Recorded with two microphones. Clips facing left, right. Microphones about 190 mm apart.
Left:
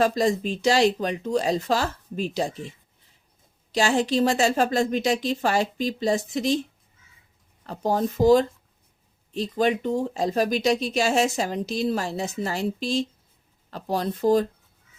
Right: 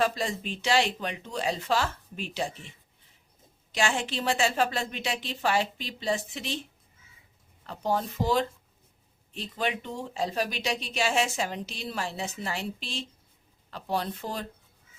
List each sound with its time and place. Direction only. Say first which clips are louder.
0.0 s speech: left 7 dB; 40° left (ahead or behind)
7.7 s speech: left 5 dB; 40° left (ahead or behind)